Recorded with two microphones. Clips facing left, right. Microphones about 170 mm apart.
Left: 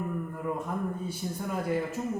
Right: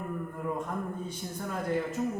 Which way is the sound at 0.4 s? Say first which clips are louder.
Left 1 dB; 5° left (ahead or behind).